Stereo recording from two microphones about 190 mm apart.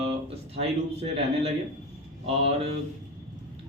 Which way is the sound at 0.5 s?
30° right (ahead or behind).